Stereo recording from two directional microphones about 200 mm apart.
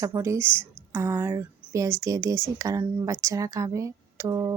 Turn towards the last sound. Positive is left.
turn(degrees=-15)  # may be behind; listen again after turning